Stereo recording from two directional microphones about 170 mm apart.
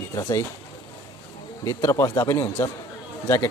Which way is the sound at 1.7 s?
20° left (ahead or behind).